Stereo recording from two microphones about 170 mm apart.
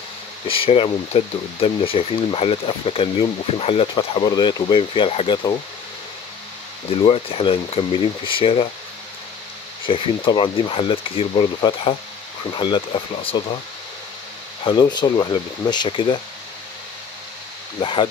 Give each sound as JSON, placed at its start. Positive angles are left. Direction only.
{"t": 0.5, "sound": "speech", "side_deg": 30}
{"t": 6.9, "sound": "speech", "side_deg": 35}
{"t": 9.8, "sound": "speech", "side_deg": 30}
{"t": 14.6, "sound": "speech", "side_deg": 25}
{"t": 17.7, "sound": "speech", "side_deg": 30}